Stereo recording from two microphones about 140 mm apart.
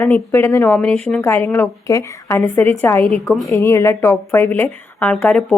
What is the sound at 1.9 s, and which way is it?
A woman's voice, 25° left (ahead or behind).